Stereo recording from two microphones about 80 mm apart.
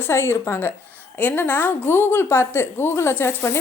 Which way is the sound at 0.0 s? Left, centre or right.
Left.